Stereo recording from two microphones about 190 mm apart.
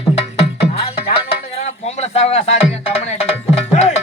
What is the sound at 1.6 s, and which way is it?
Speech, 35° left (ahead or behind).